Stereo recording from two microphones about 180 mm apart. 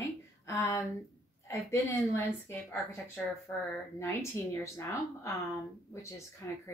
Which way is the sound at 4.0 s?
15° left (ahead or behind).